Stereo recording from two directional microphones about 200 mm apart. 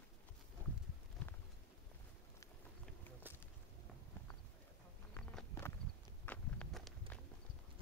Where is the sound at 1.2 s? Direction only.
10° left (ahead or behind).